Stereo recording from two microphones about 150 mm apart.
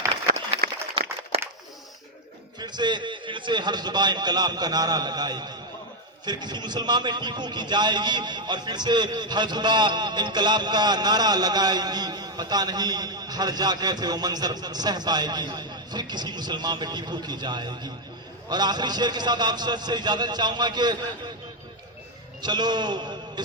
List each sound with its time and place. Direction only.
1.0 s a sound: 35° right (ahead or behind)
2.6 s a man's voice: 30° right (ahead or behind)
22.4 s a man's voice: 30° right (ahead or behind)